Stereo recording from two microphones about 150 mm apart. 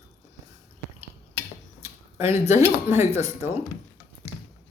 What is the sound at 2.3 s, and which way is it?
Speech, 20° right (ahead or behind).